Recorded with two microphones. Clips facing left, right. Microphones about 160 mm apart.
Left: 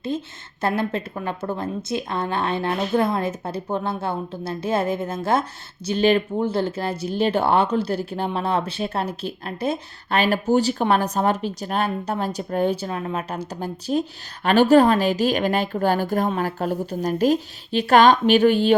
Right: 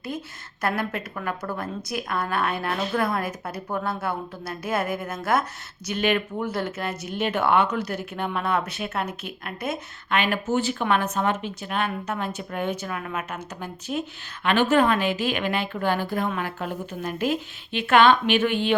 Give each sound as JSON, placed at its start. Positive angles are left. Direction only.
{"t": 0.1, "sound": "a woman's voice", "side_deg": 25}